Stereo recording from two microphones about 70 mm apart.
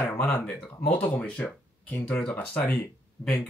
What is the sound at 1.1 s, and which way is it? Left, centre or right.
Speech, centre.